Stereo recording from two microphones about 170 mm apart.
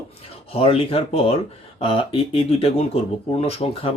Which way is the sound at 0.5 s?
35° left (ahead or behind).